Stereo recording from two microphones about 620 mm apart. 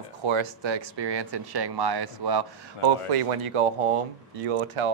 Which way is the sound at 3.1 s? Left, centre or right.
Right.